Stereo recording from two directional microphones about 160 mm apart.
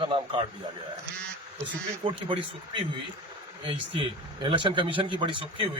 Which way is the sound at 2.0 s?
30° right (ahead or behind).